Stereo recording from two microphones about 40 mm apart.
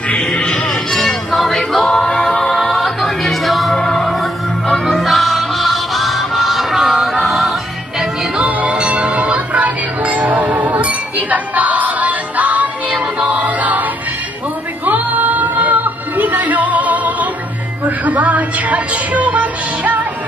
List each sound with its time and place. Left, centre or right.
0.3 s music: centre
1.0 s music: centre
1.9 s music: centre
8.5 s music: right
8.7 s music: right
14.9 s music: right
17.8 s a sound: right